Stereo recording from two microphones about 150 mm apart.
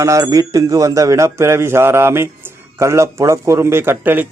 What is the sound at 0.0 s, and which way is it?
Speech, 20° right (ahead or behind).